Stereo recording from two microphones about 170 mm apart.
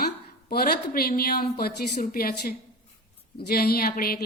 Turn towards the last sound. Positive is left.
turn(degrees=60)  # may be behind; listen again after turning